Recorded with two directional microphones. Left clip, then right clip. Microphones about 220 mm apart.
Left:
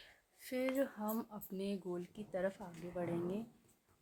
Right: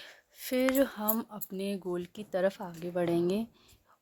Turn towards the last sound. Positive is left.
turn(degrees=-45)  # may be behind; listen again after turning